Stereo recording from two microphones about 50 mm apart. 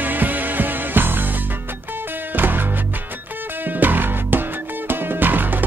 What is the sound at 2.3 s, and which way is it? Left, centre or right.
Music, right.